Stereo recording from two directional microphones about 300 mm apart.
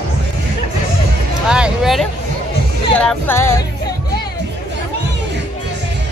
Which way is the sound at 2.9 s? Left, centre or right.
Centre.